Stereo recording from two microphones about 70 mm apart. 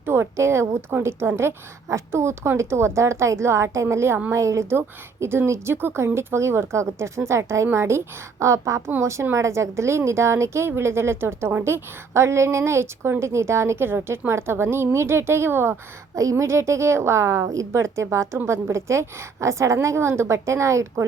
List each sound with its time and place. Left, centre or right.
0.0 s a woman's voice: right